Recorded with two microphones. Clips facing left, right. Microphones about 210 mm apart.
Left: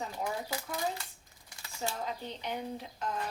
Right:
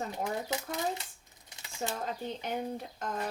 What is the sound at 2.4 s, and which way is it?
Speech, 45° right (ahead or behind).